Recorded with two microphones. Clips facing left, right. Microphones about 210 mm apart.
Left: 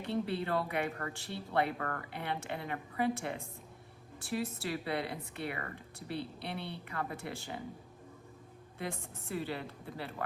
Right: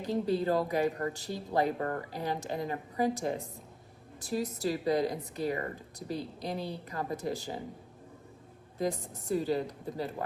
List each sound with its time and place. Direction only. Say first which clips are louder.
0.0 s a woman's voice: right 5 dB; 40° right (ahead or behind)
8.8 s a woman's voice: right 8 dB; 40° right (ahead or behind)